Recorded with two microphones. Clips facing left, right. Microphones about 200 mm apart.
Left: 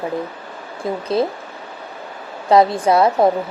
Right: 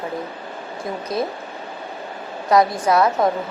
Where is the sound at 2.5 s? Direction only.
30° left (ahead or behind).